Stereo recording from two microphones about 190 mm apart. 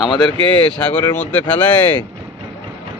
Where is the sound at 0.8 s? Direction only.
10° left (ahead or behind).